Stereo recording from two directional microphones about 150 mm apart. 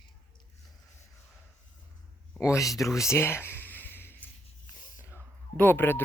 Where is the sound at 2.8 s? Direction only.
20° left (ahead or behind).